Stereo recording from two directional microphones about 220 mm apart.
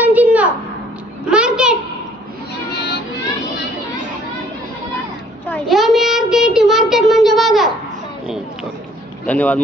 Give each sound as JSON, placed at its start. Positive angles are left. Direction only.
{"t": 0.0, "sound": "a sound", "side_deg": -5}
{"t": 2.7, "sound": "music", "side_deg": 50}
{"t": 5.5, "sound": "child singing", "side_deg": 0}
{"t": 9.2, "sound": "speech", "side_deg": 5}